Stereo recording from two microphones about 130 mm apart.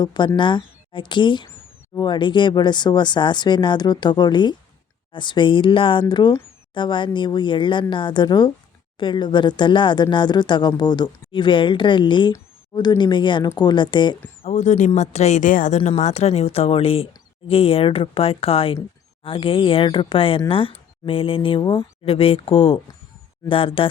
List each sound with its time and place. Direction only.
0.0 s speech: 35° left (ahead or behind)
14.4 s speech: 60° left (ahead or behind); by 23.9 s 40° left (ahead or behind)